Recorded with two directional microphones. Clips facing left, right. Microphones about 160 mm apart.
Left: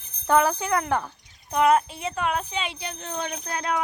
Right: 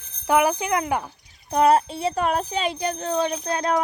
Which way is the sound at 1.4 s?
35° right (ahead or behind).